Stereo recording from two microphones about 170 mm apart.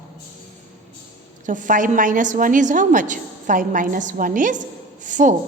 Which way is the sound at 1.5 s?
50° right (ahead or behind).